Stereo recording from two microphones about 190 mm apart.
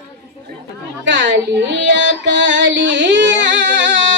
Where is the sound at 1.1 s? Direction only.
70° right (ahead or behind).